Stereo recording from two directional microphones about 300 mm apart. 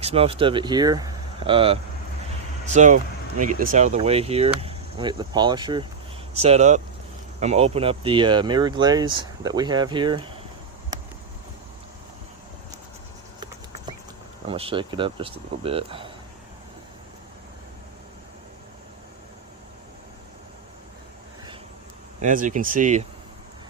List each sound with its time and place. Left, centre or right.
0.0 s speech: centre
14.4 s speech: centre
22.2 s speech: right